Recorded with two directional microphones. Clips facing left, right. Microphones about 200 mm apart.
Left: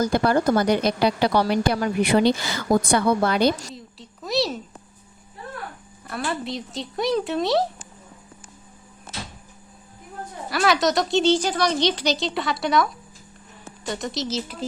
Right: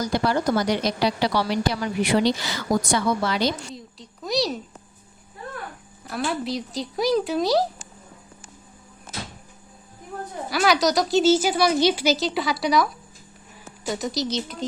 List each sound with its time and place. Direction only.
0.0 s a woman's voice: 55° left (ahead or behind)
3.8 s a sound: centre (ahead or behind)
6.1 s a woman's voice: centre (ahead or behind)
10.5 s a woman's voice: centre (ahead or behind)